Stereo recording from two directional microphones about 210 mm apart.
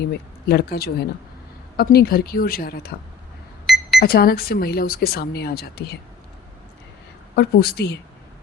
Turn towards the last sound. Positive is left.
turn(degrees=50)  # may be behind; listen again after turning